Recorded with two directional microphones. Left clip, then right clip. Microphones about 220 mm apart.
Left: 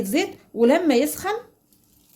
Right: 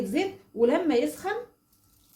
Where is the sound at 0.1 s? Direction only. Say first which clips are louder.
Left 5 dB; 50° left (ahead or behind).